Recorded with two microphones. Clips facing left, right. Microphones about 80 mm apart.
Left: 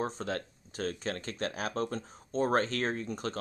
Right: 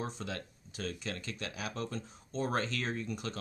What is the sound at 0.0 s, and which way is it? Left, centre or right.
Speech, left.